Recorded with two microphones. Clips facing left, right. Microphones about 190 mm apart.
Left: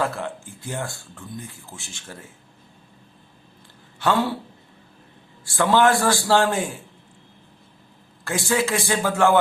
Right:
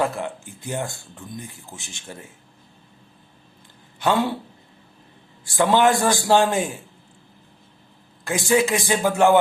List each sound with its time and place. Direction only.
0.0 s speech: 15° right (ahead or behind)
4.0 s speech: 15° right (ahead or behind)
5.5 s speech: 15° right (ahead or behind)
8.2 s speech: 15° right (ahead or behind)